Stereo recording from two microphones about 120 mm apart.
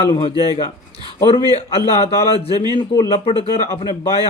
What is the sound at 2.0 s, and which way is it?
Speech, 55° left (ahead or behind).